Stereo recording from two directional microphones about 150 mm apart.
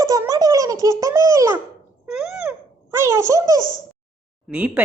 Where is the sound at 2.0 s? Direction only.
5° right (ahead or behind); by 3.6 s 20° right (ahead or behind).